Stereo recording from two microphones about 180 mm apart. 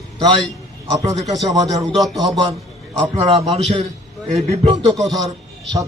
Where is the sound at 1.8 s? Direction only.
Centre (ahead or behind).